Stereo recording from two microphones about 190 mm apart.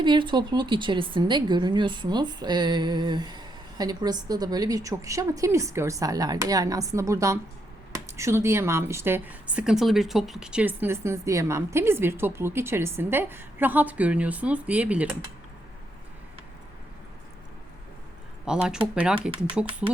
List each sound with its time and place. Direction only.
0.0 s a woman's voice: 25° right (ahead or behind); by 15.2 s 5° right (ahead or behind)
18.4 s speech: 5° right (ahead or behind)